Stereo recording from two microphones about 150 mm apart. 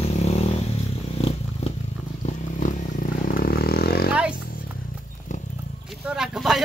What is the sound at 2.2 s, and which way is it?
Vehicle, 60° left (ahead or behind).